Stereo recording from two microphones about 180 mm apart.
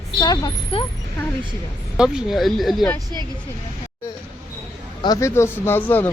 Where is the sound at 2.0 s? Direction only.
5° right (ahead or behind).